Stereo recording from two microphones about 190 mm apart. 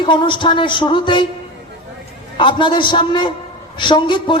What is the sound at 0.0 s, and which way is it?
A man's voice, 25° left (ahead or behind).